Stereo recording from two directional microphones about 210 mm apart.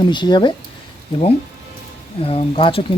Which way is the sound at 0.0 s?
20° left (ahead or behind).